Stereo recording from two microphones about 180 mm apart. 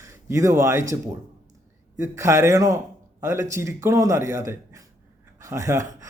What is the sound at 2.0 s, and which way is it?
Speech, 15° right (ahead or behind).